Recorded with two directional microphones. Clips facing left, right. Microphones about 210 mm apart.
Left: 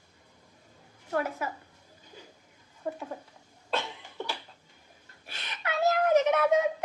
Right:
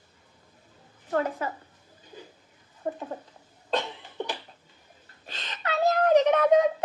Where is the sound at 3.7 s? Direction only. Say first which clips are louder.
Right 4 dB; 20° right (ahead or behind).